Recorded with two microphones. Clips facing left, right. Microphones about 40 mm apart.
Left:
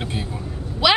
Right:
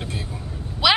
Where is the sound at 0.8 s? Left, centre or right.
Centre.